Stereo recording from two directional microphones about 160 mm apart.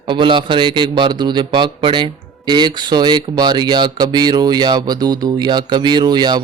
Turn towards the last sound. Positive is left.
turn(degrees=-25)  # may be behind; listen again after turning